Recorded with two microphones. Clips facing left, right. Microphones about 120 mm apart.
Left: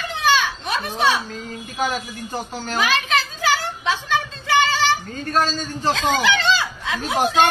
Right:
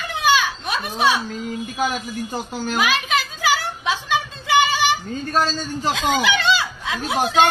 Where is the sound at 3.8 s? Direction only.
15° right (ahead or behind).